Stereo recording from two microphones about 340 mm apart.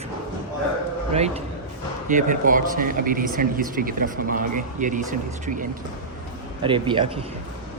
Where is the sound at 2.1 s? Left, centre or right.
Right.